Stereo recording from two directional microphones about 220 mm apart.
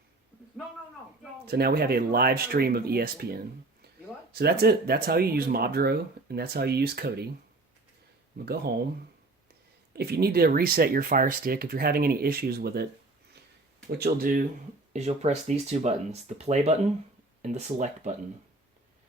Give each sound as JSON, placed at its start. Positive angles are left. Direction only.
{"t": 1.5, "sound": "speech", "side_deg": -45}
{"t": 9.9, "sound": "speech", "side_deg": -45}
{"t": 14.9, "sound": "speech", "side_deg": -30}